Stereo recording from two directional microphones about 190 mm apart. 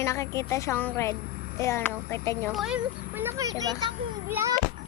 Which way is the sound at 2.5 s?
5° right (ahead or behind).